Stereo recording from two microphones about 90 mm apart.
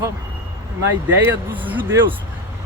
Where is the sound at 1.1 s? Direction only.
20° right (ahead or behind).